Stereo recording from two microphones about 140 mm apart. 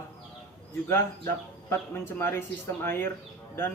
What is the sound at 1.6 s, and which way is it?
A man's voice, 15° left (ahead or behind).